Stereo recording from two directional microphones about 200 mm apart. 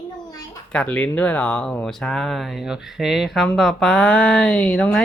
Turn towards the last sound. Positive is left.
turn(degrees=5)  # may be behind; listen again after turning